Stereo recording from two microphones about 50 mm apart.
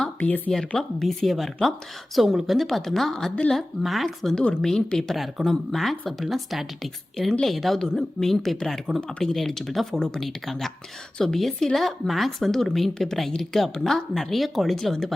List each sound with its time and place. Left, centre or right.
0.2 s speech: left
0.7 s a woman's voice: centre
1.0 s a woman's voice: centre
9.0 s speech: centre
9.2 s a woman's voice: centre